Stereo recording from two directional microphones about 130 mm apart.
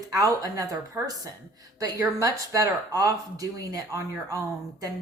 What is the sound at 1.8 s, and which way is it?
Speech, 25° right (ahead or behind).